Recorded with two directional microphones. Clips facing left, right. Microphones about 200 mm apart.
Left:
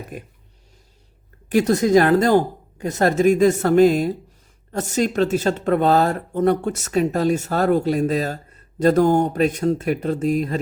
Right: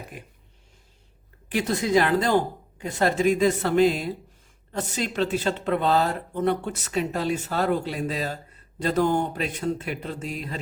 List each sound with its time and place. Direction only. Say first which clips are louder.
0.1 s speech: left 7 dB; 45° left (ahead or behind)
1.5 s speech: left 8 dB; 45° left (ahead or behind)